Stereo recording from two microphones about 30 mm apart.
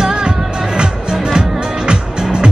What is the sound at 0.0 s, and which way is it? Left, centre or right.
Music, right.